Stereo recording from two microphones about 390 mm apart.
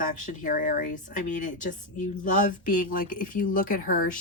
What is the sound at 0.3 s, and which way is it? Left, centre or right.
Speech, centre.